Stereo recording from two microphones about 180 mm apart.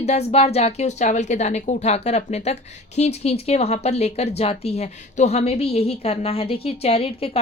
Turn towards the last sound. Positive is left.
turn(degrees=30)  # may be behind; listen again after turning